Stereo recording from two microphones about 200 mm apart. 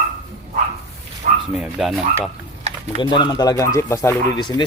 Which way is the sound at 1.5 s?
Centre (ahead or behind).